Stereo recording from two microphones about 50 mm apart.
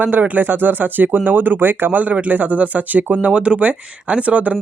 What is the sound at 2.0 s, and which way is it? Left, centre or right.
Speech, right.